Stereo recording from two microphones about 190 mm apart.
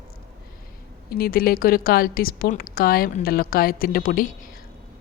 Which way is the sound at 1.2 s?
50° left (ahead or behind).